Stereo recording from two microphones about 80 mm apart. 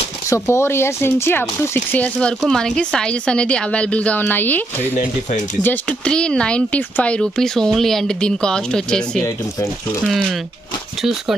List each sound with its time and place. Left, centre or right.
0.3 s speech: left
2.0 s speech: centre
6.0 s speech: centre
7.2 s speech: centre
10.0 s speech: centre